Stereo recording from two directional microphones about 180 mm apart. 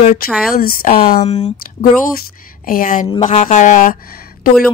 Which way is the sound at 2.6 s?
50° left (ahead or behind).